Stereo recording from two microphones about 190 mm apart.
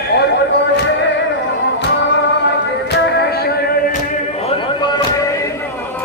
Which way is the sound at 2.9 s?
65° left (ahead or behind).